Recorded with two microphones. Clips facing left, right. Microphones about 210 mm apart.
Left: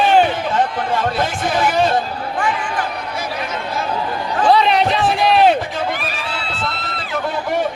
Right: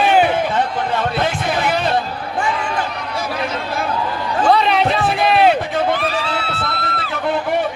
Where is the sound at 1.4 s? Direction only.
60° right (ahead or behind).